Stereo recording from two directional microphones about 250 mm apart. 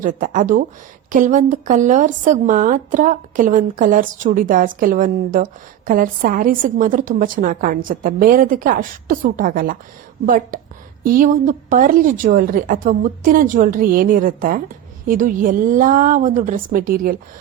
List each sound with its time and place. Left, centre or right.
0.0 s a woman's voice: right